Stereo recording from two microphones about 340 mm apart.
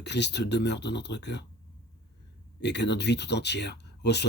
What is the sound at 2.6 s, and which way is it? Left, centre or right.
Speech, left.